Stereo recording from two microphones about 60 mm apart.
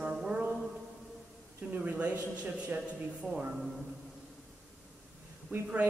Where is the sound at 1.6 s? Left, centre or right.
Right.